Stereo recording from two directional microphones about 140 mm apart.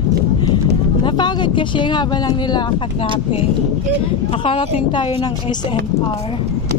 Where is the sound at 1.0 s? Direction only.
30° left (ahead or behind).